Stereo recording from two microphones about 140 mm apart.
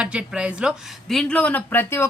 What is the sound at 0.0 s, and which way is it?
Speech, 10° right (ahead or behind).